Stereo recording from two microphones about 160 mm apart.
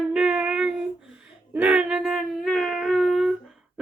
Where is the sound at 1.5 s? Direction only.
10° right (ahead or behind).